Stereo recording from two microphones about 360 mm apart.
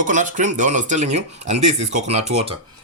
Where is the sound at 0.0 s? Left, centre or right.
Right.